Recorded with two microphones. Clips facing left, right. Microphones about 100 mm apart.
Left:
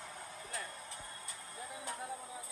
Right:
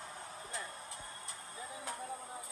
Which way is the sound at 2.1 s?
30° right (ahead or behind).